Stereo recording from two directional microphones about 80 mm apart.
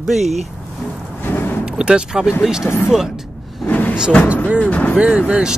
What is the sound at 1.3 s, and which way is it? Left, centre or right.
Vehicle, left.